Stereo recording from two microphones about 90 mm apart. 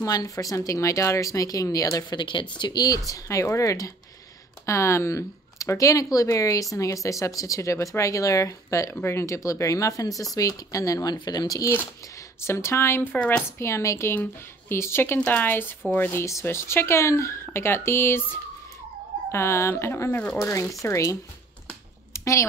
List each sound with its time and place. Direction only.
0.0 s speech: 40° left (ahead or behind)
3.1 s speech: 35° left (ahead or behind)
12.4 s speech: 30° left (ahead or behind)
13.6 s speech: 30° left (ahead or behind)
20.8 s speech: 35° left (ahead or behind)
22.1 s a sound: 35° left (ahead or behind)